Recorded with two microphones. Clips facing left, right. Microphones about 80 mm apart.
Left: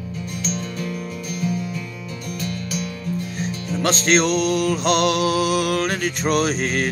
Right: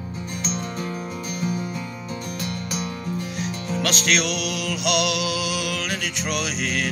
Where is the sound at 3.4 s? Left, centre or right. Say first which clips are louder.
Left 2 dB; left.